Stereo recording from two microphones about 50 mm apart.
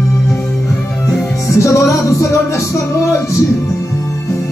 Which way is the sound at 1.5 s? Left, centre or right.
Left.